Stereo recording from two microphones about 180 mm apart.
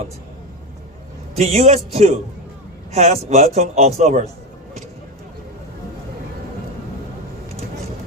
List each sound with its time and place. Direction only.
1.4 s a man's voice: 35° right (ahead or behind)